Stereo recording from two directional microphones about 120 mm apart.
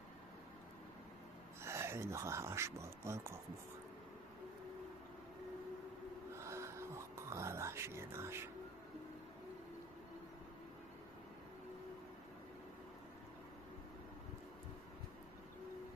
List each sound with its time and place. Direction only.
1.6 s speech: 20° right (ahead or behind)
6.3 s music: 25° right (ahead or behind)